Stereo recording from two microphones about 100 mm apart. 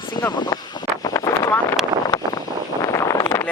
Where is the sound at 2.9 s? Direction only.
30° left (ahead or behind).